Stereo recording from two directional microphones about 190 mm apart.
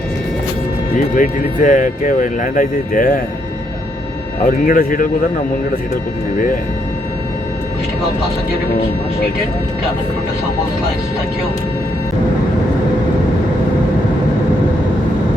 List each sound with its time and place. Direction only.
0.9 s speech: 45° left (ahead or behind)
4.4 s speech: 45° left (ahead or behind)